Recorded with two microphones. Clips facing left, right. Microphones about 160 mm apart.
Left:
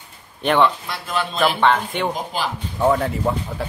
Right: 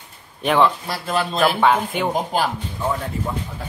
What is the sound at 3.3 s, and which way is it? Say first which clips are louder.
Speech: left 6 dB; 80° left.